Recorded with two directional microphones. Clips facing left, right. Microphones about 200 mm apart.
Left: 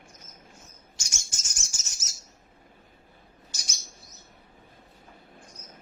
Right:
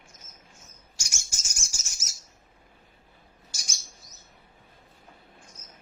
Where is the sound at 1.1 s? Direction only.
10° right (ahead or behind).